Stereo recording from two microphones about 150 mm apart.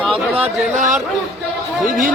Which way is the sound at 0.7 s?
55° right (ahead or behind).